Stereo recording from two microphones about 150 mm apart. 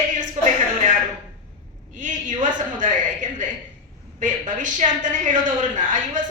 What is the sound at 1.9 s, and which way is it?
A woman's voice, 60° right (ahead or behind).